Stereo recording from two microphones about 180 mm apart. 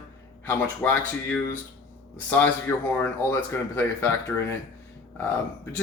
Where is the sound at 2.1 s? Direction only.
10° left (ahead or behind).